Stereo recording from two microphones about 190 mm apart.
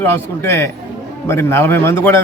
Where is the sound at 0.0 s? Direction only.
10° left (ahead or behind).